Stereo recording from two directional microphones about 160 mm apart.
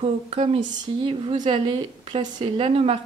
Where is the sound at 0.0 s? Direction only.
40° right (ahead or behind).